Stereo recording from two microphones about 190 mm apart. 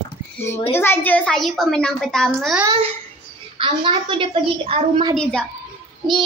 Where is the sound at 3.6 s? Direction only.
25° right (ahead or behind).